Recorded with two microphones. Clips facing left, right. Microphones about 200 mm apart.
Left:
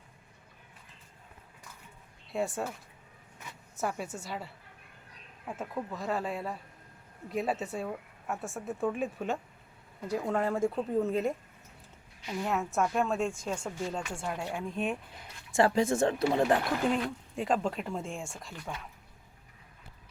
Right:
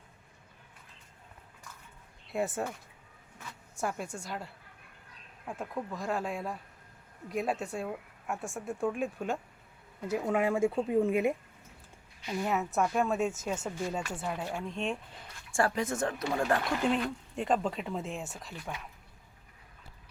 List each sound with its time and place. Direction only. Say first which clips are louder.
2.3 s speech: even; centre (ahead or behind)
3.8 s speech: left 1 dB; 5° left (ahead or behind)
15.5 s speech: left 4 dB; 25° left (ahead or behind)
16.8 s speech: even; centre (ahead or behind)